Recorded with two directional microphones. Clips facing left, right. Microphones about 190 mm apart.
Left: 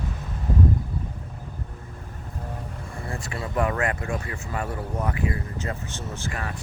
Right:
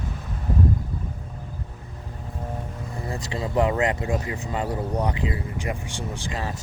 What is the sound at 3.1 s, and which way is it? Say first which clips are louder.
Speech: right 3 dB; 20° right (ahead or behind).